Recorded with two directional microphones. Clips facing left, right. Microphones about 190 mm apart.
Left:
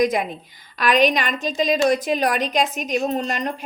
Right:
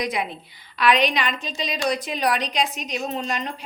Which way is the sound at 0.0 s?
45° left (ahead or behind).